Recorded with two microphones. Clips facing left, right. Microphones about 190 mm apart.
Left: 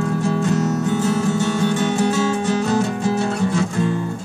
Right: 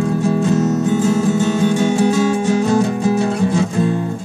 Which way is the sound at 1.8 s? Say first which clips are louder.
Right 4 dB; 15° right (ahead or behind).